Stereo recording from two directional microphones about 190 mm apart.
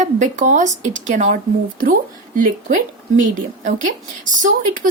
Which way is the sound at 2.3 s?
45° right (ahead or behind).